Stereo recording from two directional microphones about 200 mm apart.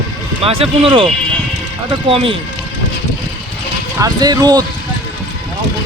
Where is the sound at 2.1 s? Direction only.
25° right (ahead or behind).